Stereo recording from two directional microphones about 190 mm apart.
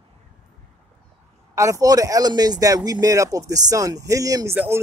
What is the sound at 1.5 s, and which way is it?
Speech, 15° right (ahead or behind).